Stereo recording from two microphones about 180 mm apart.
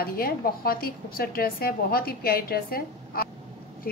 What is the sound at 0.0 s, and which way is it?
A woman's voice, 55° left (ahead or behind).